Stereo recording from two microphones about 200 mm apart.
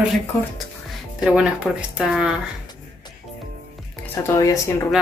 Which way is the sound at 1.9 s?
5° right (ahead or behind).